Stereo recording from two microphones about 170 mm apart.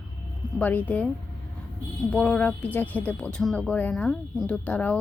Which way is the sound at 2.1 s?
10° left (ahead or behind).